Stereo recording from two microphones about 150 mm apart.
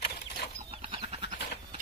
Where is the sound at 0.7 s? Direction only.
40° right (ahead or behind).